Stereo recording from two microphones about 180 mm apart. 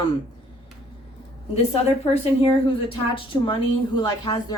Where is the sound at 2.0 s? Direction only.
35° left (ahead or behind).